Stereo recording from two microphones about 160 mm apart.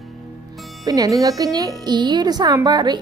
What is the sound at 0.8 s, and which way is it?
Speech, 20° right (ahead or behind).